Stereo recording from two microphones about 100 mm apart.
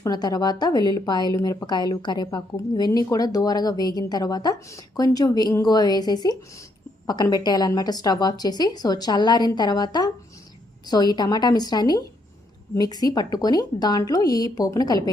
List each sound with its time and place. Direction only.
0.0 s a woman's voice: 40° left (ahead or behind)